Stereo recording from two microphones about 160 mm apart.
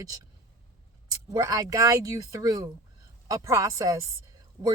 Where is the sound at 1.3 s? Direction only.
20° right (ahead or behind).